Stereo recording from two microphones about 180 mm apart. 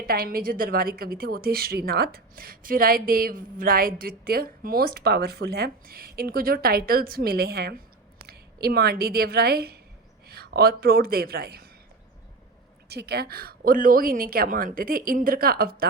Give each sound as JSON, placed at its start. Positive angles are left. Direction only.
{"t": 0.1, "sound": "a woman's voice", "side_deg": -55}
{"t": 12.9, "sound": "speech", "side_deg": -65}